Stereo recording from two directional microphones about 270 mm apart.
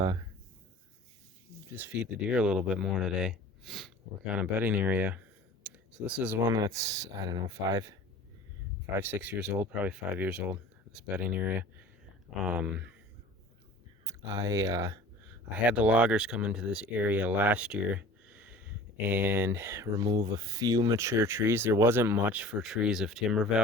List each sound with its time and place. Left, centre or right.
1.7 s speech: centre
9.0 s speech: centre
14.1 s speech: centre